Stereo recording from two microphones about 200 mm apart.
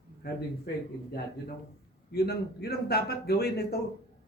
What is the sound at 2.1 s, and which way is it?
Speech, 55° left (ahead or behind).